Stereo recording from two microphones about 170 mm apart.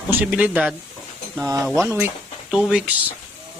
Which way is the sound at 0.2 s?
10° right (ahead or behind).